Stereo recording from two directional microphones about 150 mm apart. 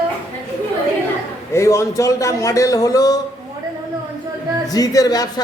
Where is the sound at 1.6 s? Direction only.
20° left (ahead or behind).